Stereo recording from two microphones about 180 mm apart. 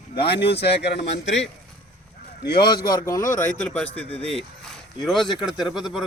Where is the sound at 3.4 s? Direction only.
5° left (ahead or behind).